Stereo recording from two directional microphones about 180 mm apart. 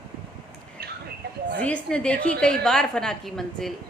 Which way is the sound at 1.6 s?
5° left (ahead or behind).